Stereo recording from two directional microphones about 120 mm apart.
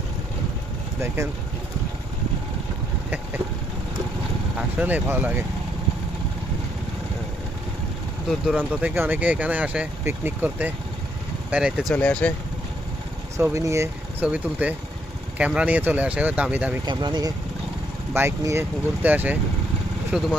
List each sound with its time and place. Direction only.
1.0 s speech: 20° right (ahead or behind)
4.8 s speech: 15° right (ahead or behind)
8.5 s speech: 15° right (ahead or behind)
11.5 s speech: 5° right (ahead or behind)
11.9 s speech: 10° left (ahead or behind)
13.3 s speech: 25° right (ahead or behind)
16.8 s speech: 40° right (ahead or behind)
18.1 s speech: 20° right (ahead or behind); by 20.3 s 5° right (ahead or behind)